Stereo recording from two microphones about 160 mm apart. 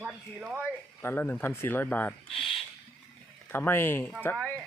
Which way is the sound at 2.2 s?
35° left (ahead or behind).